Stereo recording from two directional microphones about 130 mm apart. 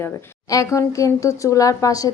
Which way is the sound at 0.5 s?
25° left (ahead or behind).